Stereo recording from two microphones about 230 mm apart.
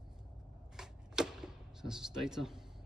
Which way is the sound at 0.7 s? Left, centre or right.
Centre.